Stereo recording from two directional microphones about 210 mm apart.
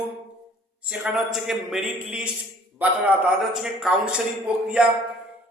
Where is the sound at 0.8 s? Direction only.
5° right (ahead or behind).